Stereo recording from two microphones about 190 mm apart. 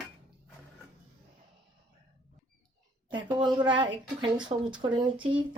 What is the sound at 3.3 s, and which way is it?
Speech, 25° right (ahead or behind).